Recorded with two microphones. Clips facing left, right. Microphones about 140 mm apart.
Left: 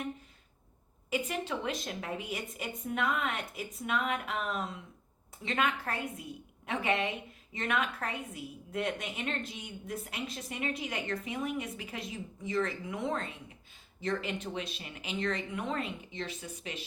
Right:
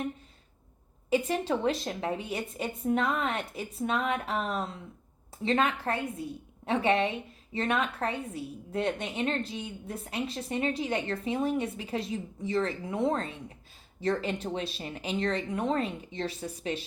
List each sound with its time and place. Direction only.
1.1 s a woman's voice: 35° right (ahead or behind)